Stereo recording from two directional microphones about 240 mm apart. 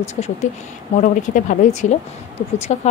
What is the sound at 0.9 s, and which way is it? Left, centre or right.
Speech, left.